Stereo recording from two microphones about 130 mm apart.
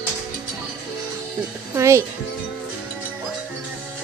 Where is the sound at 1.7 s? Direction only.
20° right (ahead or behind).